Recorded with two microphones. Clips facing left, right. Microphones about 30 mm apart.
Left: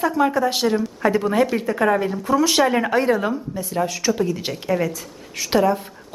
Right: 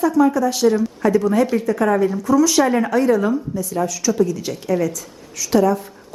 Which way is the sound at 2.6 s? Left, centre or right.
Centre.